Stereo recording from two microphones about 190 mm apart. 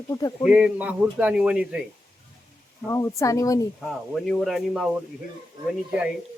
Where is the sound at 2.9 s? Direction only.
15° left (ahead or behind).